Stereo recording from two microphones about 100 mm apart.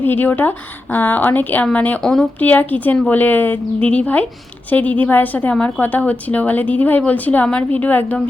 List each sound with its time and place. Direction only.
0.0 s a woman's voice: 20° left (ahead or behind)
2.0 s speech: 5° left (ahead or behind)
2.4 s a woman's voice: 15° left (ahead or behind)